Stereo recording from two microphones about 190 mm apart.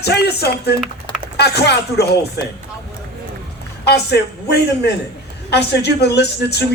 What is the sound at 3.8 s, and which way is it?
A man's voice, 60° left (ahead or behind).